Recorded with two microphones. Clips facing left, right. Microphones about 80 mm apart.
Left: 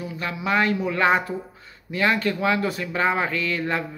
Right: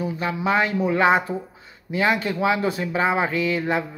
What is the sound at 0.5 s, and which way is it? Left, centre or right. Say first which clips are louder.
Speech: right 1 dB; right.